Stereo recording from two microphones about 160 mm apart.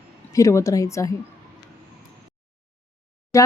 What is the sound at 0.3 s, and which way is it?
Speech, 20° left (ahead or behind).